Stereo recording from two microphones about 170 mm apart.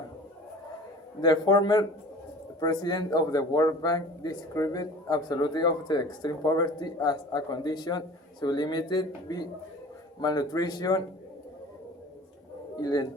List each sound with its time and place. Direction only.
1.2 s speech: 25° left (ahead or behind)
12.8 s speech: 25° left (ahead or behind)